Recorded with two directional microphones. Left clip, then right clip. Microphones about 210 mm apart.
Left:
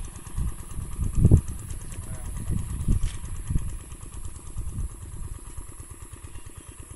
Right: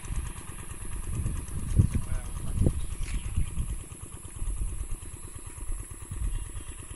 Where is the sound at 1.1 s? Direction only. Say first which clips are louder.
Left 17 dB; 50° left (ahead or behind).